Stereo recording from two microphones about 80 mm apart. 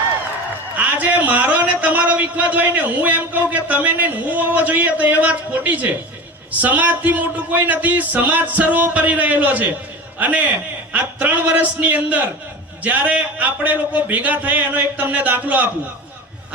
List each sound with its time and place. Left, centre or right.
0.8 s a man's voice: centre